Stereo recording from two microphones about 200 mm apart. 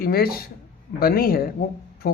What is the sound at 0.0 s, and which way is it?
Speech, 50° left (ahead or behind).